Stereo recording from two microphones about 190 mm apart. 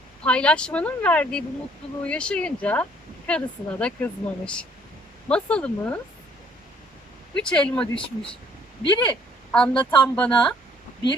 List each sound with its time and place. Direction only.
0.3 s speech: 5° left (ahead or behind)
7.3 s speech: 5° left (ahead or behind)
8.8 s speech: 25° left (ahead or behind)
9.5 s a woman's voice: 10° left (ahead or behind)